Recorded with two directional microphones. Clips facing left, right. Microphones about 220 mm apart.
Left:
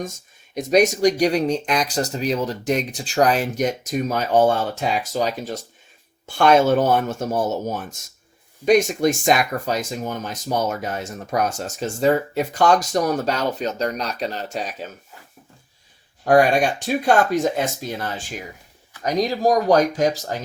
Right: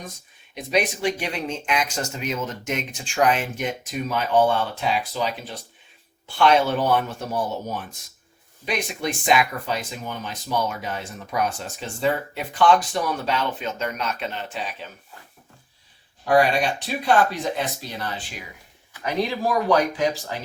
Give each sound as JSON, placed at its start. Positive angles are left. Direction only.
{"t": 0.5, "sound": "speech", "side_deg": 45}
{"t": 16.2, "sound": "speech", "side_deg": 45}